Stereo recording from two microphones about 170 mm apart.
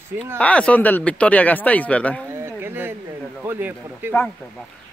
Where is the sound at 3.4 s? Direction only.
15° right (ahead or behind).